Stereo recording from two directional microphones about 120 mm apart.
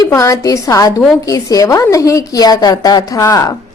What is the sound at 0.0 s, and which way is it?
A woman's voice, 25° left (ahead or behind).